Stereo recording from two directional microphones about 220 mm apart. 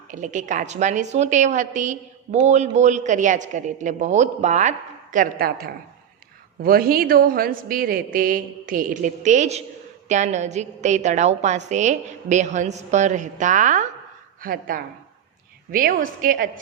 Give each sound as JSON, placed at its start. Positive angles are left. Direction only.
{"t": 0.1, "sound": "a woman's voice", "side_deg": -35}